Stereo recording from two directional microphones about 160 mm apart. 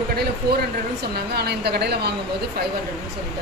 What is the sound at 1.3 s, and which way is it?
Speech, 90° right.